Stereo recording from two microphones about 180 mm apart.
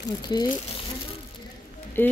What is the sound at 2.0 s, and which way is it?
Speech, 10° left (ahead or behind).